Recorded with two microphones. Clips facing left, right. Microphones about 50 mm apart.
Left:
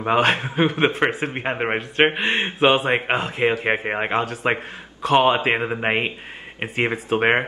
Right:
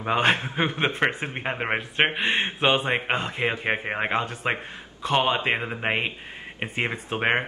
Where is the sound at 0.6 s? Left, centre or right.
Centre.